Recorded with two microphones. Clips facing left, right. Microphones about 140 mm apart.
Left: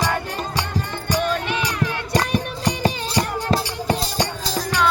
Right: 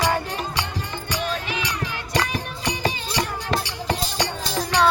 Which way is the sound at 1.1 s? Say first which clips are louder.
Left 6 dB; 50° left (ahead or behind).